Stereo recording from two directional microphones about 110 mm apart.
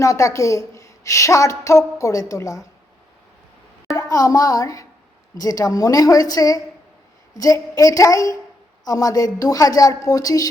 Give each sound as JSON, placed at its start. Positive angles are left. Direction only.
{"t": 0.0, "sound": "a woman's voice", "side_deg": 30}
{"t": 3.9, "sound": "a woman's voice", "side_deg": 30}